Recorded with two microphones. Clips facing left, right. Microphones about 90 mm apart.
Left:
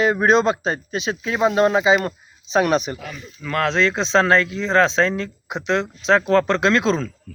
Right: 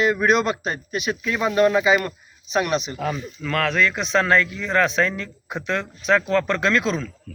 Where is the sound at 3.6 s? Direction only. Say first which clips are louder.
Left 3 dB; 25° left (ahead or behind).